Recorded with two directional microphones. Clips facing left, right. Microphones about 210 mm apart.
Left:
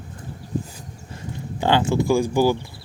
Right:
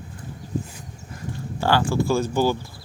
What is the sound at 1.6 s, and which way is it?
Speech, 20° left (ahead or behind).